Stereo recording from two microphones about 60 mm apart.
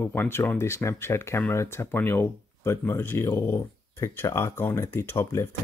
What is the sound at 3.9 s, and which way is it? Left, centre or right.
Speech, left.